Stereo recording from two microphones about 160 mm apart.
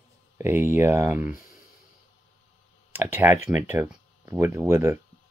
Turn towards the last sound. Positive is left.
turn(degrees=-15)  # may be behind; listen again after turning